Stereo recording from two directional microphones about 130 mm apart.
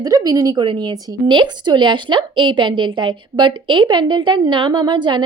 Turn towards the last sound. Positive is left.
turn(degrees=-35)  # may be behind; listen again after turning